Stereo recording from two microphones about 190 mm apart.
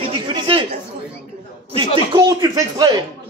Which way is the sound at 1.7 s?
25° right (ahead or behind).